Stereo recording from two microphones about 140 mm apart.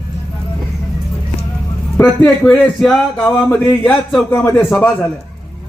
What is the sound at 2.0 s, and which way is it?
Speech, 20° left (ahead or behind).